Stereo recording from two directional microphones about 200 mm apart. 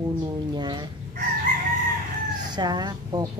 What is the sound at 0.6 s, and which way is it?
Fowl, 20° right (ahead or behind).